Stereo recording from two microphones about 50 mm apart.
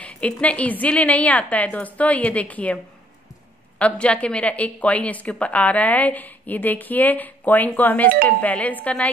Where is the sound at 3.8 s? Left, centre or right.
Left.